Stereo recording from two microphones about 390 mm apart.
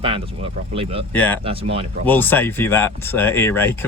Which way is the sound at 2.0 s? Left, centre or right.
Centre.